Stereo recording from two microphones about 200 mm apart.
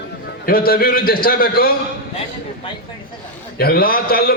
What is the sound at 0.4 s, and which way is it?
A man's voice, 45° left (ahead or behind).